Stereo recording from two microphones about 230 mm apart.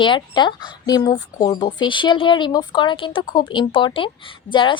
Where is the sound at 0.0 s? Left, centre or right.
Centre.